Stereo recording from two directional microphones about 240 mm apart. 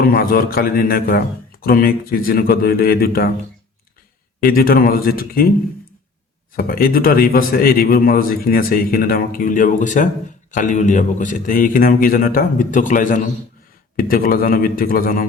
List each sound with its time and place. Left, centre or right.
0.0 s a man's voice: left
4.4 s a man's voice: left
6.6 s a man's voice: left